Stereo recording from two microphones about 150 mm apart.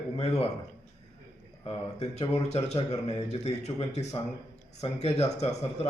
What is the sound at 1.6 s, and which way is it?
A man's voice, 40° left (ahead or behind).